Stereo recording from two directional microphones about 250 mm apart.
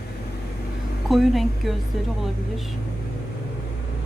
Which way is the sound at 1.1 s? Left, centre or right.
Centre.